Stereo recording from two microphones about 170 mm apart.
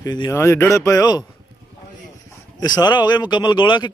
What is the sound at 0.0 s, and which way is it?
Speech, 20° left (ahead or behind).